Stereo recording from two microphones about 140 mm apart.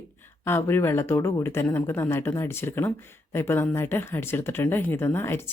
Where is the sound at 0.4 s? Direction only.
15° left (ahead or behind).